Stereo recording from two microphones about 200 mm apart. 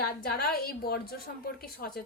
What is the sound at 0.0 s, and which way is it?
A woman's voice, 50° left (ahead or behind).